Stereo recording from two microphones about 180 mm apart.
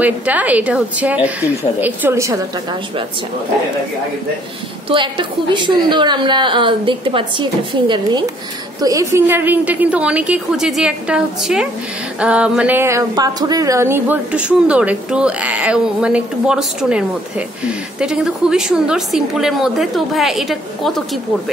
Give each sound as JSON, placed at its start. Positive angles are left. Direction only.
{"t": 0.0, "sound": "a woman's voice", "side_deg": -10}
{"t": 4.8, "sound": "a woman's voice", "side_deg": -25}
{"t": 9.1, "sound": "a woman's voice", "side_deg": -10}